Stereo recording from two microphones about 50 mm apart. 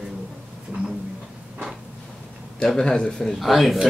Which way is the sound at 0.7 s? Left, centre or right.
Right.